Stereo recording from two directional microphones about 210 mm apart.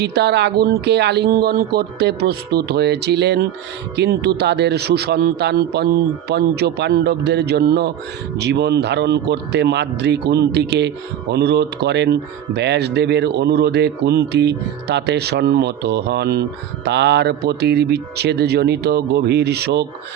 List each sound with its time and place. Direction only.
0.0 s a man's voice: 50° right (ahead or behind)